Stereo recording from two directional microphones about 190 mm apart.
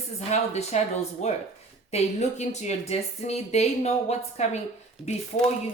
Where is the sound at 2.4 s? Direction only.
35° left (ahead or behind).